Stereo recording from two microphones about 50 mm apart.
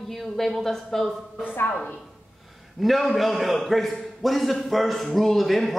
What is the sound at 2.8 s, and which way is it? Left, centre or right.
A man's voice, centre.